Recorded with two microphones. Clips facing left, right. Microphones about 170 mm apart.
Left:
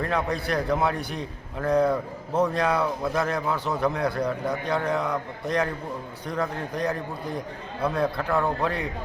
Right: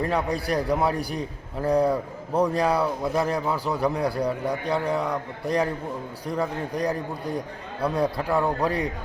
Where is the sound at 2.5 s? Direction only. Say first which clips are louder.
Right 2 dB; 35° right (ahead or behind).